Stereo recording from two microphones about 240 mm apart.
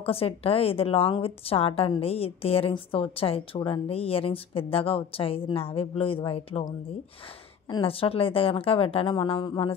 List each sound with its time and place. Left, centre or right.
0.0 s a woman's voice: left